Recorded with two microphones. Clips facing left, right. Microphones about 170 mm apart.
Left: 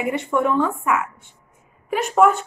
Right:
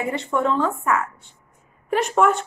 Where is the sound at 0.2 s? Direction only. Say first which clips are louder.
Left 1 dB; 15° left (ahead or behind).